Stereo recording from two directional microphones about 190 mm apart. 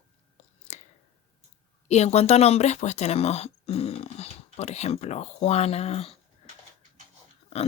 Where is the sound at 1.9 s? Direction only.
35° left (ahead or behind).